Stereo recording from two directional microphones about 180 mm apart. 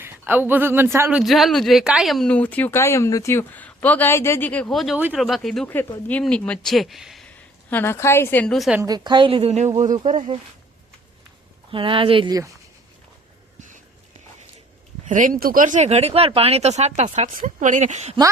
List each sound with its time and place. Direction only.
0.0 s speech: 10° right (ahead or behind)
1.2 s speech: centre (ahead or behind)
8.8 s speech: 25° right (ahead or behind)
11.7 s speech: 30° right (ahead or behind)
13.6 s a sound: 45° right (ahead or behind)
15.1 s speech: 50° right (ahead or behind)